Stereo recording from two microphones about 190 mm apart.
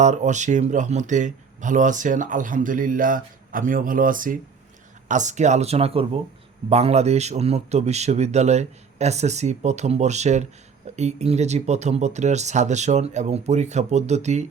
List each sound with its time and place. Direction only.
0.0 s a man's voice: 40° right (ahead or behind)